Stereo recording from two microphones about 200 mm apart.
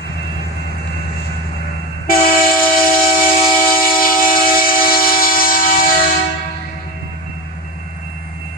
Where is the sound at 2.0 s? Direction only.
45° left (ahead or behind).